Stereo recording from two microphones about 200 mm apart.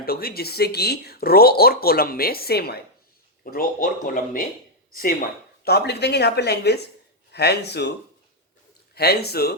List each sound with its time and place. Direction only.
0.0 s speech: 50° left (ahead or behind)
5.6 s speech: 55° left (ahead or behind)
9.0 s speech: 50° left (ahead or behind)